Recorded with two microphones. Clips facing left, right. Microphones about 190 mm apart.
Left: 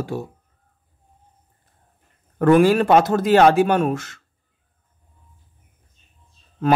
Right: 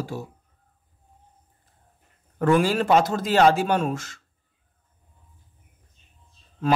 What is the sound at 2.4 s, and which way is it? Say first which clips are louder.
Speech: left 6 dB; 60° left (ahead or behind).